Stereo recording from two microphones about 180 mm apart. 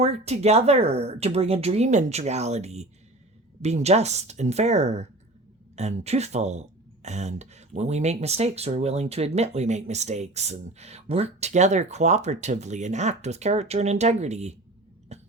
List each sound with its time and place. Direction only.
0.0 s speech: 35° right (ahead or behind)
15.1 s cough: 35° right (ahead or behind)